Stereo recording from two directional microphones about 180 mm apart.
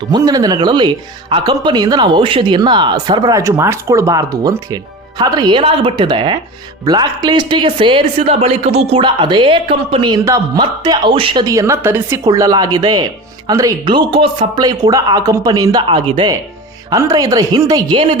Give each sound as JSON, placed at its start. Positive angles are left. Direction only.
{"t": 0.1, "sound": "speech", "side_deg": -20}